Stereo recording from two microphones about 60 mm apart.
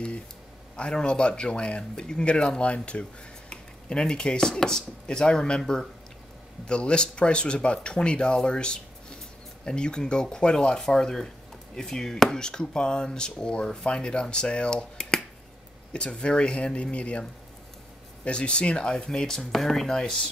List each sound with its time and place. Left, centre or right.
0.7 s speech: centre